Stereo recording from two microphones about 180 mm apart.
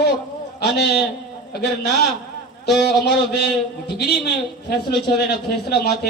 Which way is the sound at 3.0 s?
65° left (ahead or behind).